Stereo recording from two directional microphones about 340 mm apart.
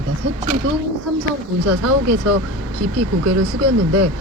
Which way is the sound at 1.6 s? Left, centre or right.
Right.